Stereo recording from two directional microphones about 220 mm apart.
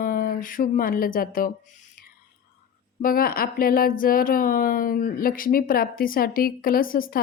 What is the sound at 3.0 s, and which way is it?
A woman's voice, 40° left (ahead or behind).